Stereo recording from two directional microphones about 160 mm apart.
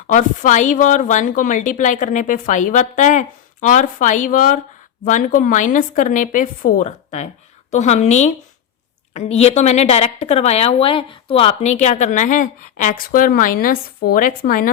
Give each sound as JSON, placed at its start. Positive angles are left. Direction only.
{"t": 0.1, "sound": "a woman's voice", "side_deg": 50}